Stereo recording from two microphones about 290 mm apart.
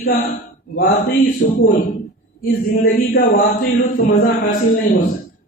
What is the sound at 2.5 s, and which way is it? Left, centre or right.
Speech, left.